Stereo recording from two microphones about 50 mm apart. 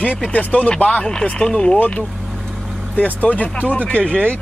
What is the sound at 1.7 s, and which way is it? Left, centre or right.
Speech, left.